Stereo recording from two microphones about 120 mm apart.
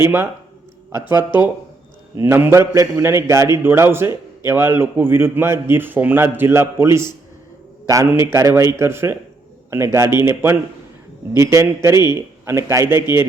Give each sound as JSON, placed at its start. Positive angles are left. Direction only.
{"t": 0.0, "sound": "a man's voice", "side_deg": -20}